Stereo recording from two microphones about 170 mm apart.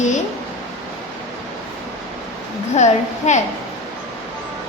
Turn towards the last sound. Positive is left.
turn(degrees=45)  # may be behind; listen again after turning